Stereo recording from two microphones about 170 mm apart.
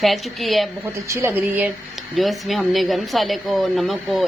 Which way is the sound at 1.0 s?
15° right (ahead or behind).